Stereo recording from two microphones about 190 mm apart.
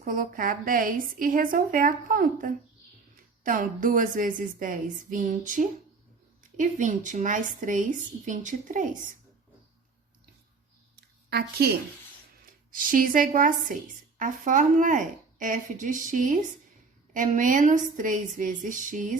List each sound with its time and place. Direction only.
0.0 s a woman's voice: 45° right (ahead or behind)
11.3 s speech: 55° right (ahead or behind)
12.7 s a woman's voice: 45° right (ahead or behind)